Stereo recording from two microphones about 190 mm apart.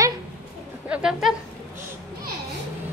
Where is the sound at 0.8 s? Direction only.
5° right (ahead or behind).